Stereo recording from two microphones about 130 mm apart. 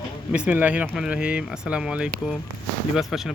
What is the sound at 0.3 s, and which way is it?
Speech, 10° right (ahead or behind).